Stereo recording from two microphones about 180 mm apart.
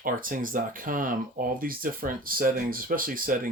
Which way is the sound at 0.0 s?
50° right (ahead or behind).